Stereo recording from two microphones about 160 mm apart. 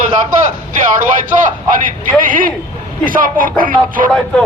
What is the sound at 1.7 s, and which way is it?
Speech, 60° right (ahead or behind).